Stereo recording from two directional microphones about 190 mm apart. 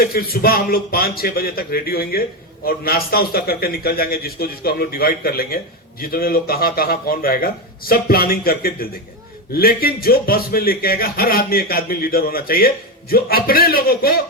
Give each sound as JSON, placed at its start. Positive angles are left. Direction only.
{"t": 0.0, "sound": "a man's voice", "side_deg": 50}